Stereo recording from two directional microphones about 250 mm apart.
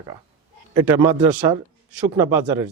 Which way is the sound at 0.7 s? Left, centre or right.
Centre.